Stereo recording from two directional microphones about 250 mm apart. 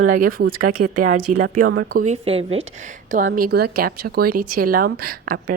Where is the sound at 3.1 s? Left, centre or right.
Right.